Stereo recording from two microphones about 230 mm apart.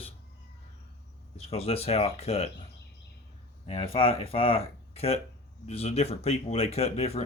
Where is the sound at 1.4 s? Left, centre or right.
Left.